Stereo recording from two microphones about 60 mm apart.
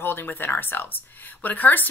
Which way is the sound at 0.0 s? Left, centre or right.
Left.